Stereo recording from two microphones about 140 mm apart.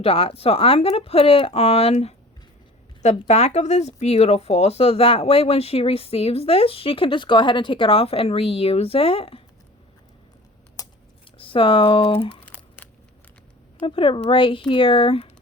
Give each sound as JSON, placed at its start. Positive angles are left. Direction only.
{"t": 0.0, "sound": "speech", "side_deg": 40}
{"t": 10.8, "sound": "a sound", "side_deg": 25}
{"t": 11.3, "sound": "speech", "side_deg": 40}
{"t": 12.4, "sound": "crumpling", "side_deg": 10}
{"t": 13.8, "sound": "speech", "side_deg": 40}